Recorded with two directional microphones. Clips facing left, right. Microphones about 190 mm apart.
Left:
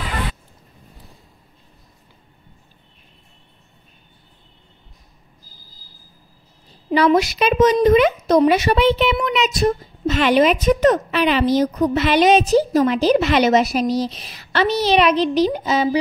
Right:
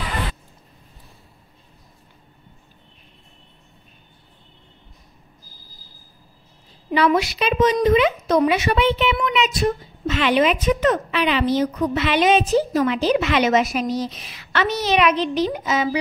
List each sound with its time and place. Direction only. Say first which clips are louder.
6.9 s a woman's voice: left 3 dB; 40° left (ahead or behind)